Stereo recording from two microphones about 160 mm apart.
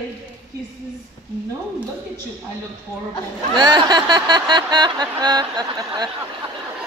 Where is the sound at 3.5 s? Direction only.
30° right (ahead or behind).